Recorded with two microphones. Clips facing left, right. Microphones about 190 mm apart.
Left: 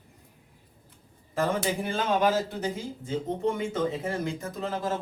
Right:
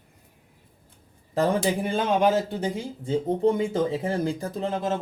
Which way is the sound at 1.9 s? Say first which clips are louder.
Right 3 dB; 20° right (ahead or behind).